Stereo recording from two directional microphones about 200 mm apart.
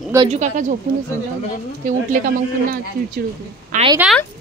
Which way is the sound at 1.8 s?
40° right (ahead or behind).